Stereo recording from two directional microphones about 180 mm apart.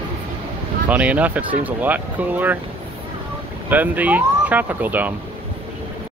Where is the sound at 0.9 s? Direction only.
10° right (ahead or behind).